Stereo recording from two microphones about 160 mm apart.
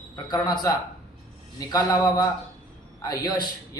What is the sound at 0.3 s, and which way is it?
A man's voice, 25° left (ahead or behind).